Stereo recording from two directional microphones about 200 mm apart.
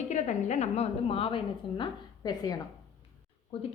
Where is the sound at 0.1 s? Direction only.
35° left (ahead or behind); by 2.6 s 20° left (ahead or behind).